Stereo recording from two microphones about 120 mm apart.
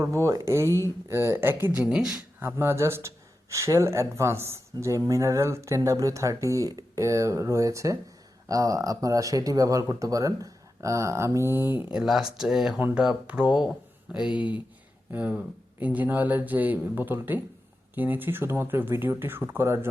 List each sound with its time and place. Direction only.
0.0 s speech: 25° right (ahead or behind)
1.8 s speech: 5° right (ahead or behind)
2.4 s speech: 20° right (ahead or behind)
11.9 s speech: 5° right (ahead or behind); by 19.9 s 20° right (ahead or behind)